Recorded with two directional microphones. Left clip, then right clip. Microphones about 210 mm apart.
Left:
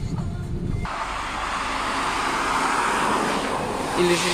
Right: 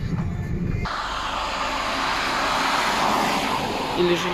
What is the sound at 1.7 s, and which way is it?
Vehicle, 20° right (ahead or behind).